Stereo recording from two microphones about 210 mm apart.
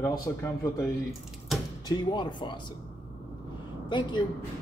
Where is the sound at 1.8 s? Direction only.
20° left (ahead or behind).